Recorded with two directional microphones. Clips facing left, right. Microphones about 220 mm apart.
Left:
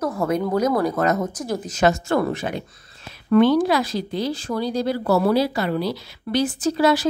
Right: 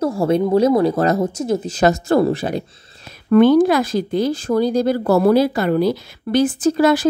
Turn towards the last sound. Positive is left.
turn(degrees=-50)  # may be behind; listen again after turning